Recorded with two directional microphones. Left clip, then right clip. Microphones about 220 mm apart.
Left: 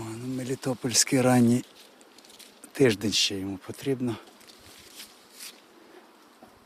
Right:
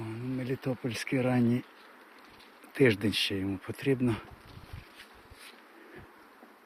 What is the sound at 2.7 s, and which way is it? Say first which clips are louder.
Speech: left 3 dB; 15° left (ahead or behind).